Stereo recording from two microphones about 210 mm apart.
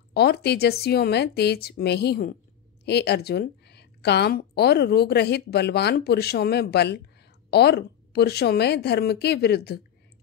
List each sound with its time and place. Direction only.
0.1 s a woman's voice: 50° left (ahead or behind)